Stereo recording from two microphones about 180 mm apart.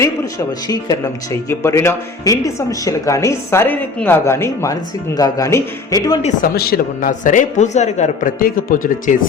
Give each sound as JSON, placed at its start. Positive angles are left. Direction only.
{"t": 0.0, "sound": "speech", "side_deg": 20}
{"t": 6.5, "sound": "a man's voice", "side_deg": 60}